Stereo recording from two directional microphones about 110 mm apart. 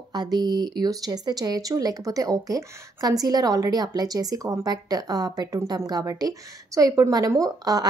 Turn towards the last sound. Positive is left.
turn(degrees=-35)  # may be behind; listen again after turning